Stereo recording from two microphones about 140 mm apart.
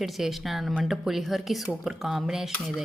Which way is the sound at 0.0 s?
Centre (ahead or behind).